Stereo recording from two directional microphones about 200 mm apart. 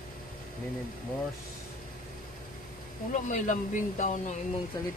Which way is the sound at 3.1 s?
40° left (ahead or behind).